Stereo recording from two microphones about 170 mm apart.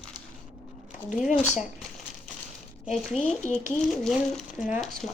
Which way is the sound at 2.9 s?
Centre (ahead or behind).